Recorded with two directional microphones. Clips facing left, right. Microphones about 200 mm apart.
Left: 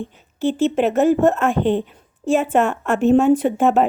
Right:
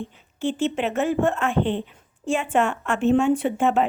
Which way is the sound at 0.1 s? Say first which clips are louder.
Left 8 dB; 40° left (ahead or behind).